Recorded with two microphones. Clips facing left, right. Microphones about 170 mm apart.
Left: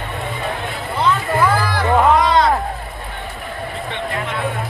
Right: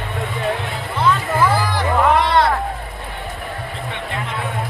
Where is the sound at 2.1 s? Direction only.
60° right (ahead or behind).